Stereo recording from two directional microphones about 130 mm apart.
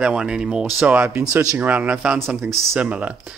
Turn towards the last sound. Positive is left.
turn(degrees=-10)  # may be behind; listen again after turning